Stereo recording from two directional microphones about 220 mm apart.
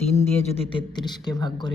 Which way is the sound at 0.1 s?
30° left (ahead or behind).